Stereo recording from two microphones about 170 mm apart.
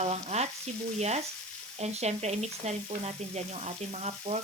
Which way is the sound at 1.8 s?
40° right (ahead or behind).